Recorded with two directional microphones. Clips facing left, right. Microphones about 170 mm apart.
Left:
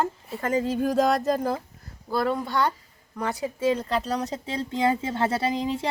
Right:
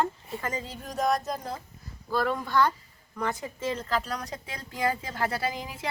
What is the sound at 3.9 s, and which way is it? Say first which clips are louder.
Speech: left 4 dB; 30° left (ahead or behind).